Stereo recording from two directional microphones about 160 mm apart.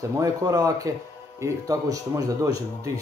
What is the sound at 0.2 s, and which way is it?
A man's voice, 20° right (ahead or behind).